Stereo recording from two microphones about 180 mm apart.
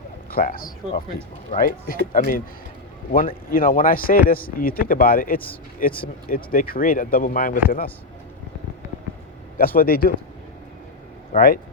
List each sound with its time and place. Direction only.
0.3 s speech: 50° left (ahead or behind)
9.6 s speech: 55° left (ahead or behind)
11.3 s speech: 50° left (ahead or behind)